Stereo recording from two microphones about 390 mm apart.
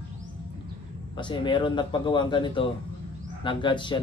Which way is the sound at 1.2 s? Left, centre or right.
Centre.